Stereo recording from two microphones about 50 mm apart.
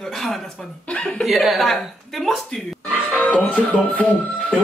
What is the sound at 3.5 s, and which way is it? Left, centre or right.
Speech, left.